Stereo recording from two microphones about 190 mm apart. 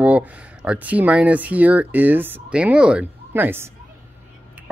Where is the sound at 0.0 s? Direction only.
10° right (ahead or behind).